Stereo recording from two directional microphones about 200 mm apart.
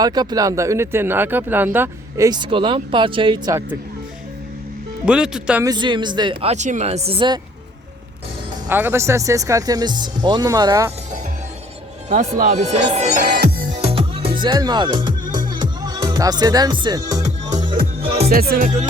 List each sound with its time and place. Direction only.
0.0 s speech: 20° right (ahead or behind)
5.0 s speech: 5° right (ahead or behind)
5.6 s speech: 20° right (ahead or behind)
8.7 s speech: 10° right (ahead or behind)
12.0 s speech: 35° right (ahead or behind)
13.4 s music: 40° right (ahead or behind); by 17.7 s 20° right (ahead or behind)
18.3 s music: 50° right (ahead or behind)